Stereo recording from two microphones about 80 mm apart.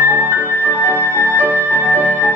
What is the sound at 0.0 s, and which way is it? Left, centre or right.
Music, right.